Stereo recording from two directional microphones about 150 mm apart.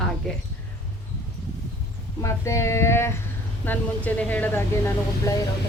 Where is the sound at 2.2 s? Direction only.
20° left (ahead or behind).